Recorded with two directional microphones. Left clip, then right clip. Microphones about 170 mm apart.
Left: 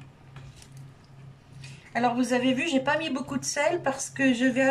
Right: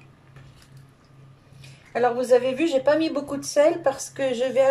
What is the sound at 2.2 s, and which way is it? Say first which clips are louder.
A woman's voice: right 6 dB; 30° right (ahead or behind).